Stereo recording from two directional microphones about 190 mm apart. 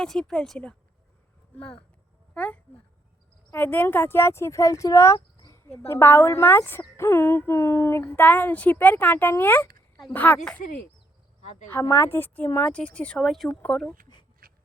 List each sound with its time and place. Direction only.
0.0 s speech: 5° left (ahead or behind)
11.7 s speech: 15° left (ahead or behind)
14.4 s a sound: 50° right (ahead or behind)